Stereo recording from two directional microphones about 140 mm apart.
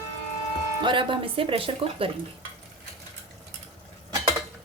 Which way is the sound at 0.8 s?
35° right (ahead or behind).